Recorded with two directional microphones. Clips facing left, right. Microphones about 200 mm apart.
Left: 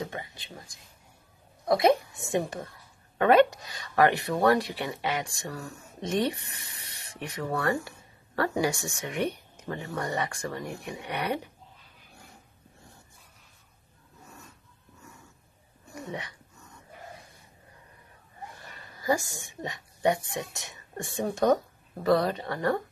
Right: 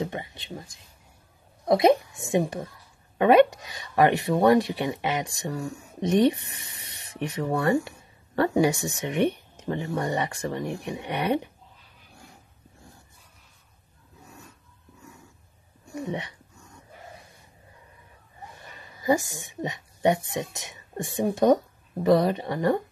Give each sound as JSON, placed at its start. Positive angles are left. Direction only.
{"t": 0.0, "sound": "speech", "side_deg": -20}
{"t": 1.7, "sound": "speech", "side_deg": -20}
{"t": 15.9, "sound": "a sound", "side_deg": -25}
{"t": 18.6, "sound": "speech", "side_deg": -15}